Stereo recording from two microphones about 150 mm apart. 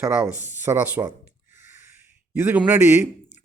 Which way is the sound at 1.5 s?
60° left (ahead or behind).